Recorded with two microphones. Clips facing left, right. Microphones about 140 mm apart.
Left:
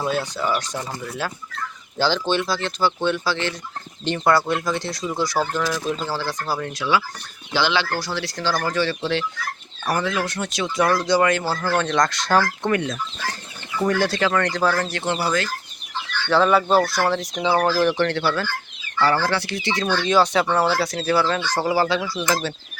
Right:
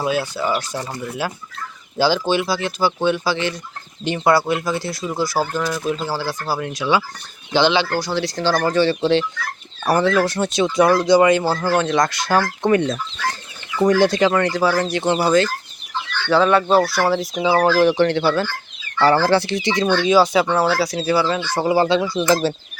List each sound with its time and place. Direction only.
0.0 s speech: 5° right (ahead or behind)
7.5 s speech: 20° right (ahead or behind); by 12.5 s 5° right (ahead or behind)
12.6 s speech: 25° right (ahead or behind)
14.0 s speech: 20° right (ahead or behind)
14.5 s speech: 5° right (ahead or behind); by 15.4 s 25° right (ahead or behind)
16.3 s speech: centre (ahead or behind); by 18.4 s 15° right (ahead or behind)
19.0 s speech: 30° right (ahead or behind)
19.6 s speech: 15° right (ahead or behind)
21.7 s speech: 20° right (ahead or behind)